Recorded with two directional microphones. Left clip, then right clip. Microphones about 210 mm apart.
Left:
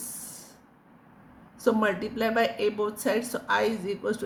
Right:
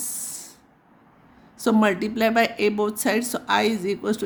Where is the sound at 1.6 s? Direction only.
55° right (ahead or behind).